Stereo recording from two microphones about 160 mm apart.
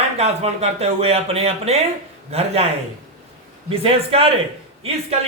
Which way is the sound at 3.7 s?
35° right (ahead or behind).